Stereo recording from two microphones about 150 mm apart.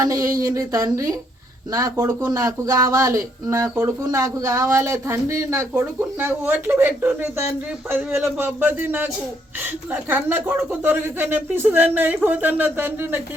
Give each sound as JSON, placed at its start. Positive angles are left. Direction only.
{"t": 0.0, "sound": "speech", "side_deg": -20}